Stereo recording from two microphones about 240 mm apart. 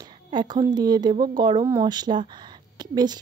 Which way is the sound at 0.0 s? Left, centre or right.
Centre.